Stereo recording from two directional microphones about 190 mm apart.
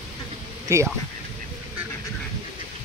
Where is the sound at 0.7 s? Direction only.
15° right (ahead or behind).